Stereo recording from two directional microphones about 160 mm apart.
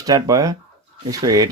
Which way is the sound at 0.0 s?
25° right (ahead or behind).